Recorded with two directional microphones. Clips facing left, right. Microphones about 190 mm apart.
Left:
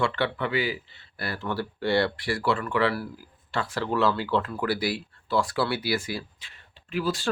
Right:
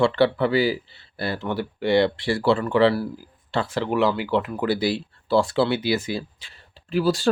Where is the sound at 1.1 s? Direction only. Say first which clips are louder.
Right 4 dB; 25° right (ahead or behind).